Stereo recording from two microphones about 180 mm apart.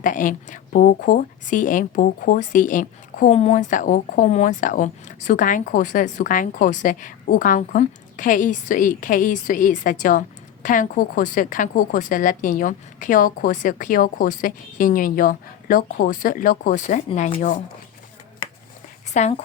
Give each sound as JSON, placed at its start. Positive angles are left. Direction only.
{"t": 0.0, "sound": "speech", "side_deg": 45}
{"t": 19.1, "sound": "speech", "side_deg": 40}